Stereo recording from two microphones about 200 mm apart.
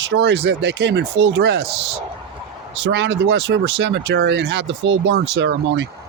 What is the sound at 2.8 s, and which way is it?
Speech, 60° right (ahead or behind).